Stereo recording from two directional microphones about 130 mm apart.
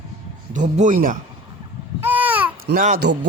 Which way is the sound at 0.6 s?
75° right (ahead or behind).